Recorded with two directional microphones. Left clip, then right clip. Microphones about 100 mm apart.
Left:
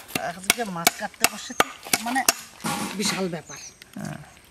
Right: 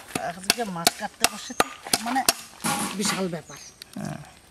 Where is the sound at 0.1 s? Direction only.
5° left (ahead or behind).